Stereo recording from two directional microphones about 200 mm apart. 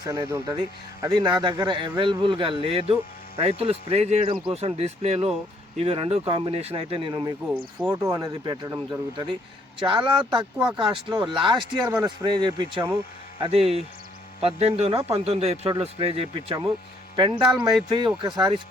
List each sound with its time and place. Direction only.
0.0 s a man's voice: 20° right (ahead or behind)
13.4 s a man's voice: 30° right (ahead or behind)
17.4 s speech: 5° right (ahead or behind)
17.8 s a man's voice: 25° right (ahead or behind)